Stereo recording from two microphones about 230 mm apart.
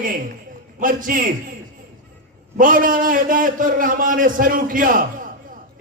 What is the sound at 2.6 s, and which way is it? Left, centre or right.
A man's voice, right.